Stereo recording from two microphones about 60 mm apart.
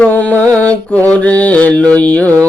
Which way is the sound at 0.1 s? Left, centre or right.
Left.